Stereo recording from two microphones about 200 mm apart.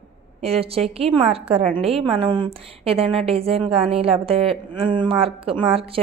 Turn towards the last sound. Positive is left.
turn(degrees=-30)  # may be behind; listen again after turning